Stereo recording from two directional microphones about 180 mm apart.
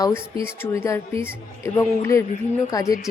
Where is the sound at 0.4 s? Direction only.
15° left (ahead or behind).